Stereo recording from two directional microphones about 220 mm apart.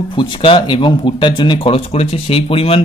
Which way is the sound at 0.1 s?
20° left (ahead or behind).